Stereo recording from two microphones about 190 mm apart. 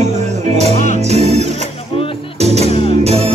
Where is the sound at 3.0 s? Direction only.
35° right (ahead or behind).